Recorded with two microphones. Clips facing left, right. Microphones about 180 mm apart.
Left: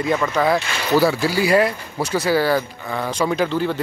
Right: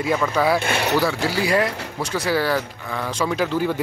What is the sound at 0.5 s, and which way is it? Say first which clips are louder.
Speech: right 2 dB; 60° right (ahead or behind).